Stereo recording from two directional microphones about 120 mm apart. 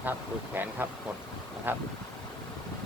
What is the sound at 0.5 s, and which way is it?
Speech, 15° right (ahead or behind).